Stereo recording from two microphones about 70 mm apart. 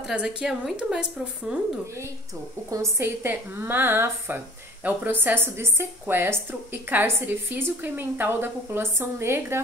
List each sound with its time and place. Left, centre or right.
0.0 s a woman's voice: centre
3.0 s a woman's voice: right